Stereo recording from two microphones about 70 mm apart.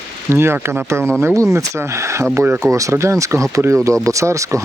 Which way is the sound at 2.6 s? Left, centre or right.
Right.